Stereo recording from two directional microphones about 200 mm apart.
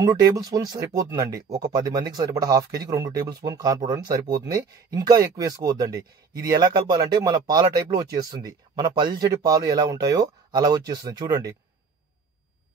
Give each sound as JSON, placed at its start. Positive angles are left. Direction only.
{"t": 0.0, "sound": "speech", "side_deg": -20}